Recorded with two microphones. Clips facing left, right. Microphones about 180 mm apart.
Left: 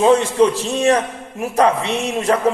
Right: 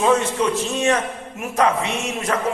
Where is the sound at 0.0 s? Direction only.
30° left (ahead or behind).